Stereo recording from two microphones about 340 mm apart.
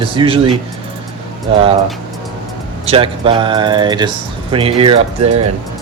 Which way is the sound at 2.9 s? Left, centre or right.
Centre.